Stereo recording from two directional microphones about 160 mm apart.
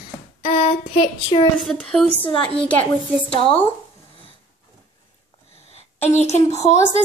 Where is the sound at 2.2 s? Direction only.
30° left (ahead or behind).